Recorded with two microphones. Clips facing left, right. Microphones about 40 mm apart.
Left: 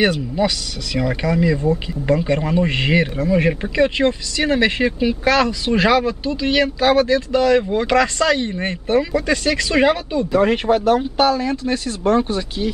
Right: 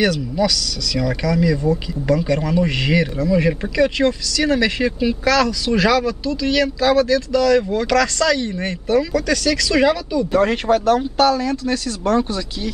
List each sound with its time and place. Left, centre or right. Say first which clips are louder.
0.0 s speech: even; left
10.4 s speech: left 2 dB; centre